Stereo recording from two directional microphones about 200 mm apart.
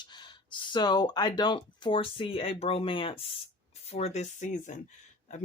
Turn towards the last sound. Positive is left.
turn(degrees=40)  # may be behind; listen again after turning